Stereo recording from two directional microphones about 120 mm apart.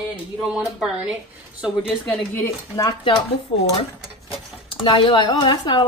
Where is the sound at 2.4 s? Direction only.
25° left (ahead or behind).